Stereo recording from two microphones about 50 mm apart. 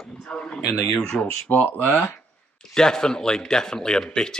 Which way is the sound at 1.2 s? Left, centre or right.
Left.